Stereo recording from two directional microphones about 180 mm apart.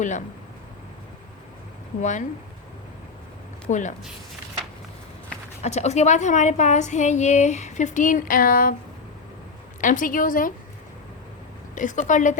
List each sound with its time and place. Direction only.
2.0 s a woman's voice: 40° left (ahead or behind)
3.7 s a woman's voice: 45° left (ahead or behind)
5.6 s a woman's voice: 40° left (ahead or behind)
9.8 s a woman's voice: 45° left (ahead or behind)
11.7 s a woman's voice: 45° left (ahead or behind)